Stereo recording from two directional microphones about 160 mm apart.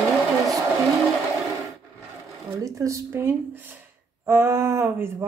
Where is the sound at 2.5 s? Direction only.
20° right (ahead or behind).